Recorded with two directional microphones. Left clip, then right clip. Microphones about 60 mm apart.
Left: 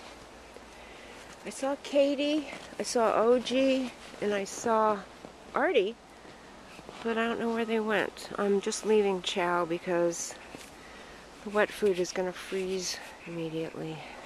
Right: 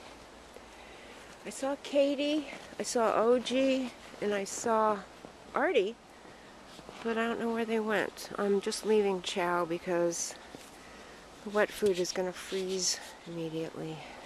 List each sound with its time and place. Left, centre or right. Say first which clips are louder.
1.4 s speech: left 2 dB; centre
4.4 s speech: left 2 dB; centre
7.0 s speech: left 2 dB; centre
11.5 s speech: left 2 dB; centre